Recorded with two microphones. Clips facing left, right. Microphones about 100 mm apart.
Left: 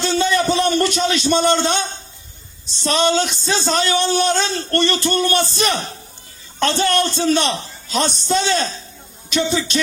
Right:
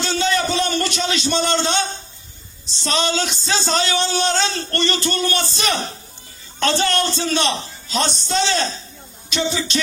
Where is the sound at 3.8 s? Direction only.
50° left (ahead or behind).